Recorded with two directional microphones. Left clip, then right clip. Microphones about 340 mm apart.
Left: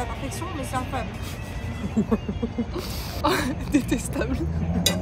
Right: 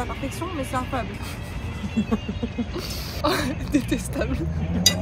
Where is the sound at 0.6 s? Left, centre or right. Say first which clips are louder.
Right 2 dB; centre.